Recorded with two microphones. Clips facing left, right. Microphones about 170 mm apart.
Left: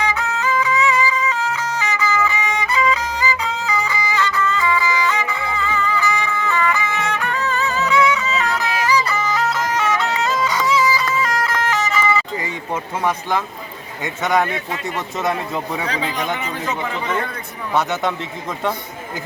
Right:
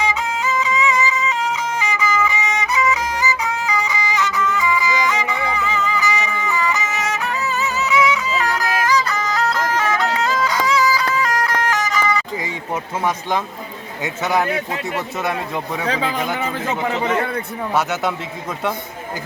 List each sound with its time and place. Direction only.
0.0 s music: 15° right (ahead or behind); by 12.2 s 5° left (ahead or behind)
12.4 s a sound: 10° right (ahead or behind)
14.0 s speech: 5° right (ahead or behind)
16.6 s a man's voice: 50° right (ahead or behind)